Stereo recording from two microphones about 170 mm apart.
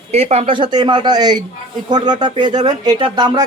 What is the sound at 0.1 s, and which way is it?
Speech, 40° right (ahead or behind).